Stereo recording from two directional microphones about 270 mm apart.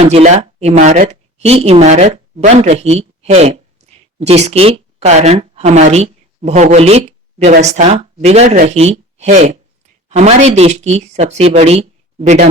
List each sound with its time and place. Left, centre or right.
0.0 s speech: right